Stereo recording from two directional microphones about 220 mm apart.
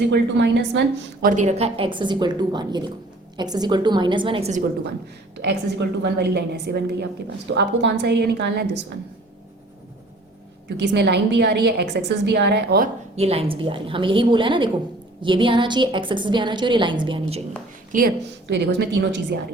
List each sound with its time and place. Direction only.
0.1 s a woman's voice: 50° right (ahead or behind)
1.3 s a woman's voice: 30° right (ahead or behind)
5.4 s a woman's voice: 50° right (ahead or behind)
10.9 s a woman's voice: 50° right (ahead or behind)
13.1 s a woman's voice: 25° right (ahead or behind)
17.9 s a woman's voice: 45° right (ahead or behind)